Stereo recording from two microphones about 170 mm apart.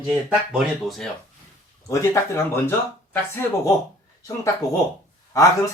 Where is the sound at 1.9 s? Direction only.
20° left (ahead or behind).